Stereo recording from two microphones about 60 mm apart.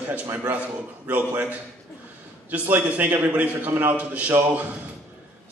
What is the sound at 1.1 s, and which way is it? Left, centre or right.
Speech, right.